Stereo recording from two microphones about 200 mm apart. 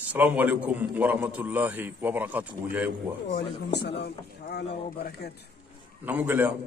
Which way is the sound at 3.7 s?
55° left (ahead or behind).